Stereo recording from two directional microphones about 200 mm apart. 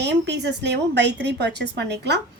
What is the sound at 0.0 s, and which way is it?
A woman's voice, 60° right (ahead or behind).